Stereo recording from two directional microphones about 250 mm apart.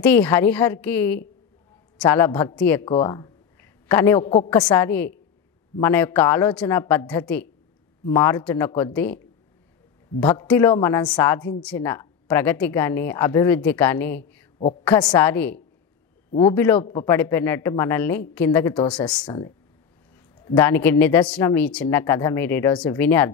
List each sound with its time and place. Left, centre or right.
0.0 s speech: centre
10.2 s speech: centre